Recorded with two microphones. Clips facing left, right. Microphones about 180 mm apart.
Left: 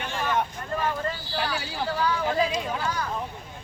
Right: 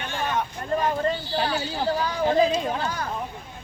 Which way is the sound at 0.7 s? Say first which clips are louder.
Right 8 dB; 35° right (ahead or behind).